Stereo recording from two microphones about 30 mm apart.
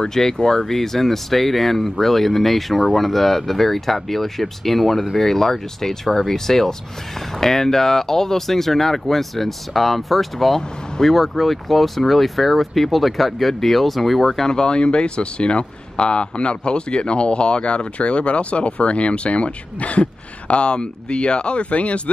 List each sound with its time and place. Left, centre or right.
0.1 s speech: centre
14.5 s speech: left